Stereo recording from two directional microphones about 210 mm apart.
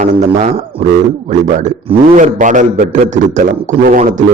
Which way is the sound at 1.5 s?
35° right (ahead or behind).